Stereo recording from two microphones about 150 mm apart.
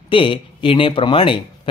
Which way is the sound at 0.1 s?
35° left (ahead or behind).